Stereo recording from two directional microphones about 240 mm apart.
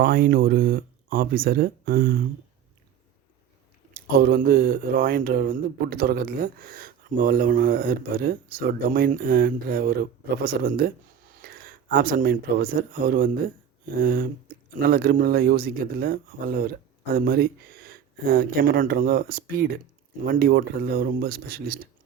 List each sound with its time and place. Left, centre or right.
0.0 s speech: right
3.9 s speech: right